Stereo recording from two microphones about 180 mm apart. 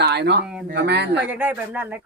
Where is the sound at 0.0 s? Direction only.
70° right (ahead or behind).